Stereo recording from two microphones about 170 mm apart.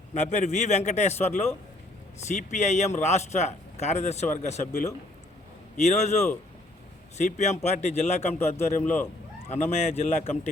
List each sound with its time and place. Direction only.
0.1 s a man's voice: 40° left (ahead or behind)